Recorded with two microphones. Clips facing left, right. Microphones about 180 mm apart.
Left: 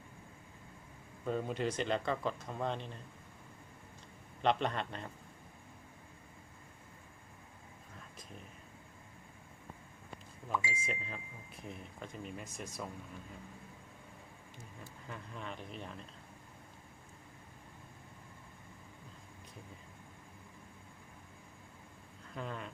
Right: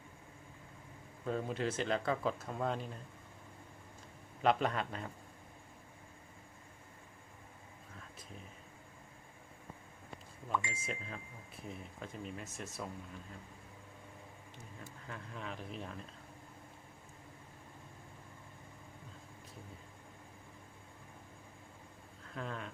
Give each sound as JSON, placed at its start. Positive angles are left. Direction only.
{"t": 1.2, "sound": "speech", "side_deg": 0}
{"t": 4.4, "sound": "speech", "side_deg": -5}
{"t": 10.5, "sound": "speech", "side_deg": 5}
{"t": 15.0, "sound": "speech", "side_deg": 0}
{"t": 22.4, "sound": "speech", "side_deg": 0}